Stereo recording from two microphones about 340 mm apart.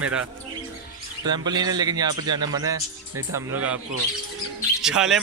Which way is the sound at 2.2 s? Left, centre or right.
Right.